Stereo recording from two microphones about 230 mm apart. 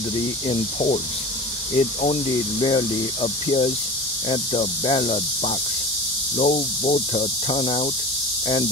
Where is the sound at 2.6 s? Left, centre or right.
Left.